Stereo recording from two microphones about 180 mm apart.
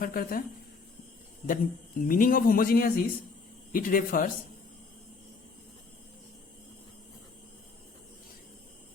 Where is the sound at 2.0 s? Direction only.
50° left (ahead or behind).